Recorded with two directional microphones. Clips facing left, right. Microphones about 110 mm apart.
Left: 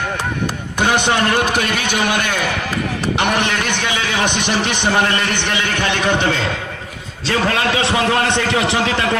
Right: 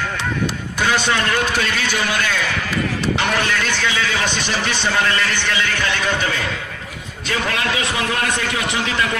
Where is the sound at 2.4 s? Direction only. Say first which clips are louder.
Left 1 dB; 45° left (ahead or behind).